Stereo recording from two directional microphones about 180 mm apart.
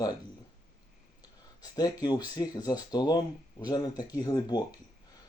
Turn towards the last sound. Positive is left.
turn(degrees=20)  # may be behind; listen again after turning